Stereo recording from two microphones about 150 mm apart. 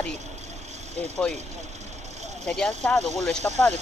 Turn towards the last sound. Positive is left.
turn(degrees=5)  # may be behind; listen again after turning